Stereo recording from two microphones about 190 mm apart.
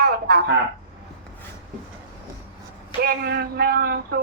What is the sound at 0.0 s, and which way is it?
Speech, 55° right (ahead or behind).